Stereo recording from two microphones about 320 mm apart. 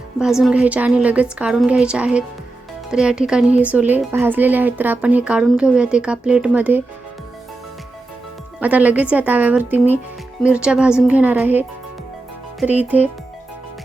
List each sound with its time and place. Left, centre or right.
0.2 s speech: centre
8.6 s a child's voice: centre